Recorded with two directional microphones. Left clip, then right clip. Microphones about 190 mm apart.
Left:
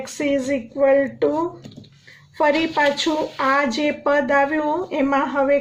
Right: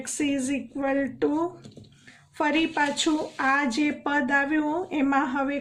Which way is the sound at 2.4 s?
50° right (ahead or behind).